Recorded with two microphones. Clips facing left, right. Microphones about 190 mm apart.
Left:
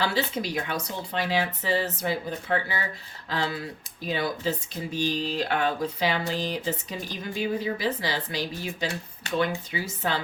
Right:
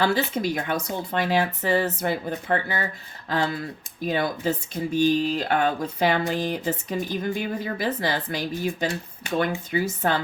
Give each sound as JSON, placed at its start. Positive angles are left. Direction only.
{"t": 0.0, "sound": "speech", "side_deg": -50}